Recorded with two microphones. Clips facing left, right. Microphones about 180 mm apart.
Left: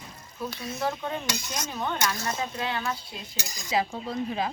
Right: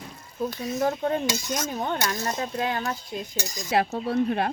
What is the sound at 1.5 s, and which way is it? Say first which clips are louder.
Speech: right 4 dB; 45° right (ahead or behind).